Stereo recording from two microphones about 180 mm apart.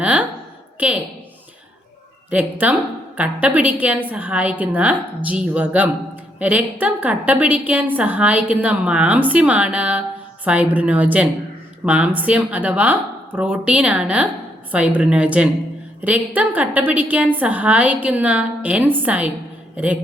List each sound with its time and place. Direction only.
0.0 s a sound: 5° right (ahead or behind)
0.8 s a woman's voice: 10° right (ahead or behind)
2.3 s a woman's voice: 10° right (ahead or behind)